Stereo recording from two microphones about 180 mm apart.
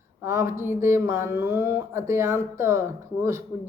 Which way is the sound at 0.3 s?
15° right (ahead or behind).